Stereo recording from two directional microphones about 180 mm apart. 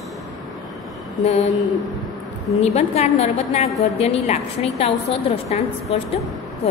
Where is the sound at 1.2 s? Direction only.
40° left (ahead or behind).